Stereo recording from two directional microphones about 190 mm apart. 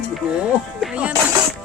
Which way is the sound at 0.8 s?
5° right (ahead or behind).